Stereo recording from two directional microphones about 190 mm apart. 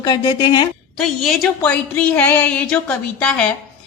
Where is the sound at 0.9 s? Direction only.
Centre (ahead or behind).